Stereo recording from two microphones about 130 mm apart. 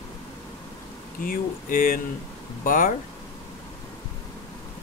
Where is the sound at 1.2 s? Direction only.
90° left.